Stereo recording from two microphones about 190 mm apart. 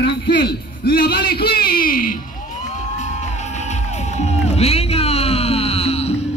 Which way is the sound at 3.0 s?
35° left (ahead or behind).